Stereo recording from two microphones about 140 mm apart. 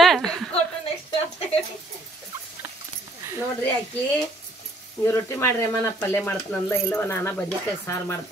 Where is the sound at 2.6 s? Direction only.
15° right (ahead or behind).